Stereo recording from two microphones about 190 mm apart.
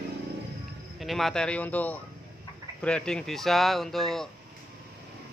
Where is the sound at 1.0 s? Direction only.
Centre (ahead or behind).